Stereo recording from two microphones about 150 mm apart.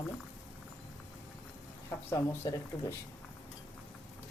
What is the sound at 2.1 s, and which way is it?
Speech, 20° left (ahead or behind).